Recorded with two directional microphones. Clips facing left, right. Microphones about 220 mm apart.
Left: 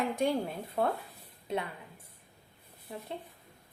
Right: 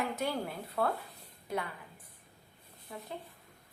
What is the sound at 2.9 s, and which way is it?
Speech, 30° left (ahead or behind).